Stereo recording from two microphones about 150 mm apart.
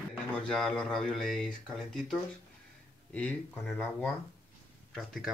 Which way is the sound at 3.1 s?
10° left (ahead or behind).